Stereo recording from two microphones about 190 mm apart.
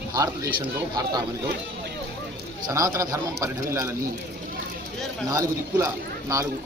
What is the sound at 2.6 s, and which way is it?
A man's voice, 15° right (ahead or behind).